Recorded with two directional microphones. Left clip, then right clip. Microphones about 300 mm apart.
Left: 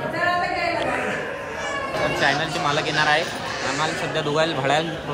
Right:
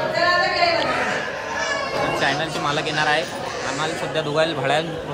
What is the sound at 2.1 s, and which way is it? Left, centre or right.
Speech, centre.